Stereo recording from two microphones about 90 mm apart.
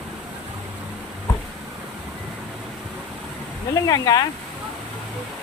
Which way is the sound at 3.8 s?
45° left (ahead or behind).